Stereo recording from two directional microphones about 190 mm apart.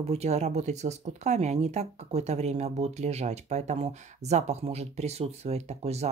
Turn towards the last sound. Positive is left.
turn(degrees=-35)  # may be behind; listen again after turning